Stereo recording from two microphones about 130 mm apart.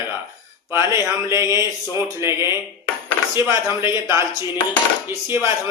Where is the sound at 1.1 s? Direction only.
20° right (ahead or behind).